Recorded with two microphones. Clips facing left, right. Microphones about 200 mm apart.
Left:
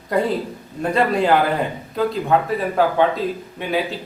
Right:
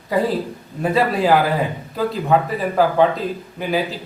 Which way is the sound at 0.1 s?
Centre (ahead or behind).